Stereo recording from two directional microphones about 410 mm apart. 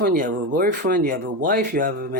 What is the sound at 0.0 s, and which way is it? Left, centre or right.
Speech, right.